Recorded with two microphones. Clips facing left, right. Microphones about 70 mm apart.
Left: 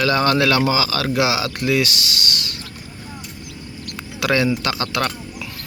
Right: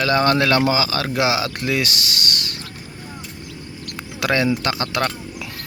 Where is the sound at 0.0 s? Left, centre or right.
Right.